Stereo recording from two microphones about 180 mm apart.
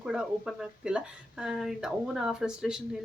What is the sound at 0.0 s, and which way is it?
Speech, 5° right (ahead or behind).